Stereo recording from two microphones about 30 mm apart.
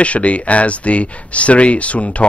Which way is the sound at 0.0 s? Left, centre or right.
Left.